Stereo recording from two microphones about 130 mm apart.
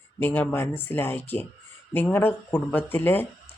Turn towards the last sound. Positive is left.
turn(degrees=15)  # may be behind; listen again after turning